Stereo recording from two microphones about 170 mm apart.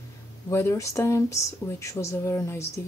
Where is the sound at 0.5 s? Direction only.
15° left (ahead or behind).